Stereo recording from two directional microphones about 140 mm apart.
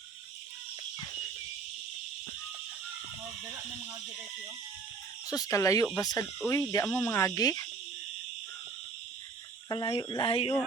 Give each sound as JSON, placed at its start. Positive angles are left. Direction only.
{"t": 5.3, "sound": "insect", "side_deg": 25}
{"t": 9.6, "sound": "speech", "side_deg": 30}